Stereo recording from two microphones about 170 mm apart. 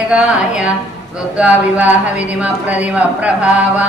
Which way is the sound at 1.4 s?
10° right (ahead or behind).